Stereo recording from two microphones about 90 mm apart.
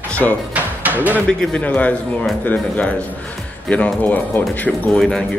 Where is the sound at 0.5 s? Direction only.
15° right (ahead or behind).